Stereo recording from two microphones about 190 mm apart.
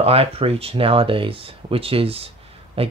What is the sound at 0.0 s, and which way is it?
Speech, 30° right (ahead or behind).